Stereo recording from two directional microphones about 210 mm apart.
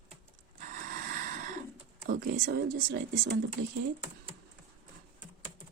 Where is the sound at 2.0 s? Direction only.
45° right (ahead or behind).